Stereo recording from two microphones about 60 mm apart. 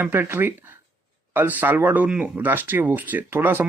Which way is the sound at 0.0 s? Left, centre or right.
Right.